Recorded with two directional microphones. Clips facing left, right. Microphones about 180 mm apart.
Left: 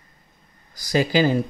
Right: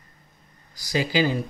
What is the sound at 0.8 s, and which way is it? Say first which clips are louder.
Speech: left 4 dB; 50° left (ahead or behind).